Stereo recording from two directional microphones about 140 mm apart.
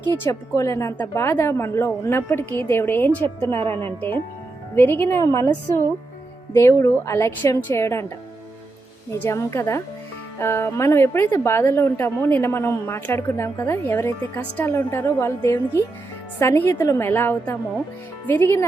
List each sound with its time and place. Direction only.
0.2 s a woman's voice: 20° left (ahead or behind)
9.2 s a woman's voice: 20° left (ahead or behind)